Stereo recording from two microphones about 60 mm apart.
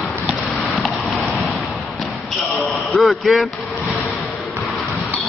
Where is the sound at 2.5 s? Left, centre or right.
Centre.